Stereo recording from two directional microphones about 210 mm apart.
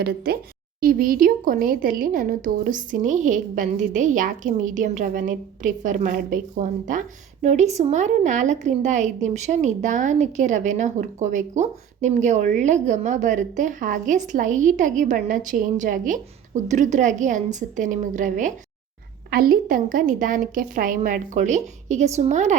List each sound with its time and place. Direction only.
0.8 s a woman's voice: 45° right (ahead or behind)